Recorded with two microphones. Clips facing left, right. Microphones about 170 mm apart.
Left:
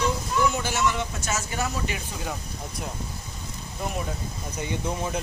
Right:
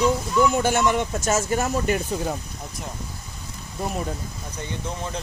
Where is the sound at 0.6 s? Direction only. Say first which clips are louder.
Right 6 dB; 55° right (ahead or behind).